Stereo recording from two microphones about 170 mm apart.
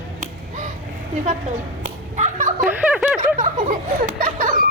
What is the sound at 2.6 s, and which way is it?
Speech, 5° right (ahead or behind).